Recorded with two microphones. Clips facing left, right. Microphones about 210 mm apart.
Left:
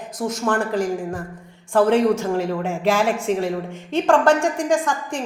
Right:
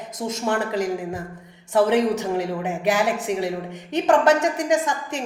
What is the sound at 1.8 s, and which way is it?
A woman's voice, 20° right (ahead or behind).